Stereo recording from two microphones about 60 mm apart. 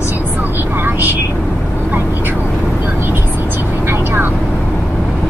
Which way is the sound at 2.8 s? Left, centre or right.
Right.